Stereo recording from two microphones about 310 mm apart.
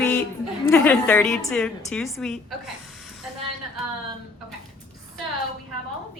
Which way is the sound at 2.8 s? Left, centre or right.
Centre.